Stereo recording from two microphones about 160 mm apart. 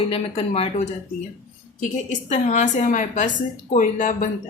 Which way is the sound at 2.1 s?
50° left (ahead or behind).